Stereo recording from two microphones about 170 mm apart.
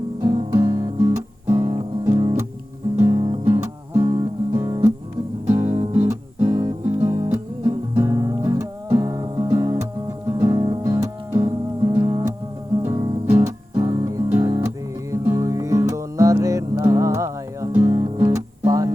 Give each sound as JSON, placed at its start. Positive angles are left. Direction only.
{"t": 0.2, "sound": "music", "side_deg": -20}
{"t": 6.1, "sound": "music", "side_deg": -20}